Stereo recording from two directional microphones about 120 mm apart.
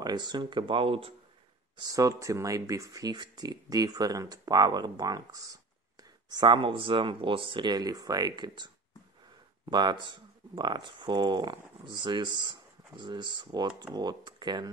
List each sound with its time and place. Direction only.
0.0 s speech: 35° right (ahead or behind)
1.8 s speech: 30° right (ahead or behind)
6.2 s speech: 40° right (ahead or behind)